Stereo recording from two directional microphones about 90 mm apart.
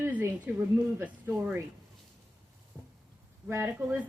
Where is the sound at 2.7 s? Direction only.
10° right (ahead or behind).